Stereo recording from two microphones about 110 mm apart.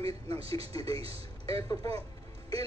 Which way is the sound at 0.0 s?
65° right (ahead or behind).